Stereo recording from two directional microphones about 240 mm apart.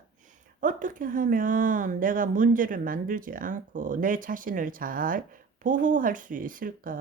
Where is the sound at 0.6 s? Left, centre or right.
Right.